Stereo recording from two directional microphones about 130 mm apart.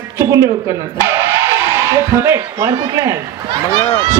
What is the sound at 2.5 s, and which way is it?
Speech, 30° right (ahead or behind).